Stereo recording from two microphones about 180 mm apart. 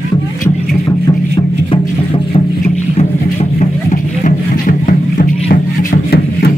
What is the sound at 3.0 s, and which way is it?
Music, 35° left (ahead or behind).